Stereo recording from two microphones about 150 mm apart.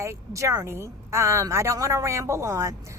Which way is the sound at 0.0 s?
20° right (ahead or behind).